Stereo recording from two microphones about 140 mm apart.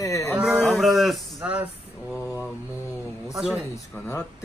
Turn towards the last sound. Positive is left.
turn(degrees=-5)  # may be behind; listen again after turning